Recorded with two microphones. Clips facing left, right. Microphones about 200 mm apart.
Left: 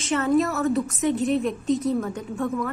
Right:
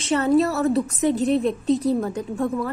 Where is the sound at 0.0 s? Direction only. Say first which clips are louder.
Right 3 dB; 35° right (ahead or behind).